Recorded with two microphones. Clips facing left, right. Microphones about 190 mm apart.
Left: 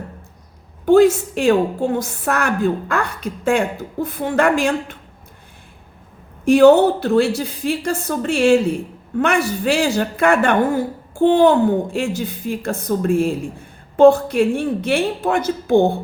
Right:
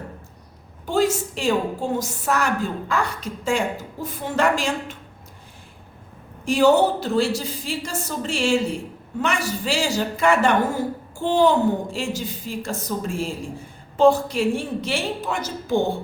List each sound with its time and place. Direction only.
0.9 s a woman's voice: 60° left (ahead or behind)
6.4 s a woman's voice: 60° left (ahead or behind)